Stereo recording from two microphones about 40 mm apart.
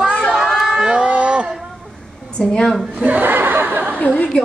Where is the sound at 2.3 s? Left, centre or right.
Centre.